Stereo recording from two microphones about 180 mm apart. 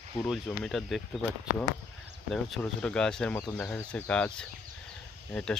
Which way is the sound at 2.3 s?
5° left (ahead or behind).